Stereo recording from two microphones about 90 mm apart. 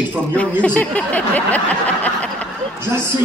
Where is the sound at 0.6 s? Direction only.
15° left (ahead or behind).